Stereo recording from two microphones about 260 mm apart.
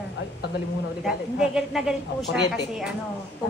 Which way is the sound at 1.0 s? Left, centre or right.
Centre.